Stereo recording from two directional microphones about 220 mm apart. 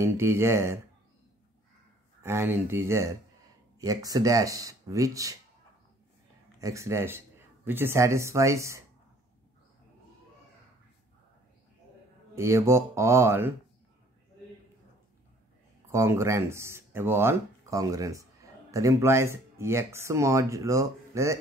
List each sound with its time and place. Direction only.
0.0 s speech: 10° right (ahead or behind)
2.2 s speech: 10° right (ahead or behind)
6.6 s speech: 15° right (ahead or behind)
12.4 s speech: 15° right (ahead or behind)
15.9 s speech: 10° right (ahead or behind)